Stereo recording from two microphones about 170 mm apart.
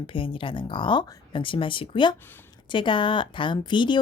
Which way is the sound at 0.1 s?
30° left (ahead or behind).